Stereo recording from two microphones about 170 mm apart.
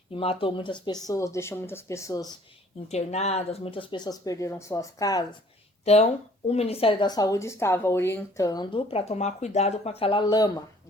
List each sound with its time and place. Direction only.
0.1 s speech: 30° left (ahead or behind)
2.9 s speech: 40° left (ahead or behind); by 5.2 s 20° left (ahead or behind)
5.8 s speech: 40° left (ahead or behind)